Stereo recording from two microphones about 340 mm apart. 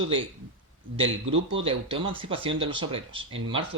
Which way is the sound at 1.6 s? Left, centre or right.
Centre.